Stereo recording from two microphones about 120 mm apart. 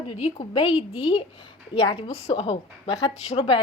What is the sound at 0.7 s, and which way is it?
Speech, 10° right (ahead or behind).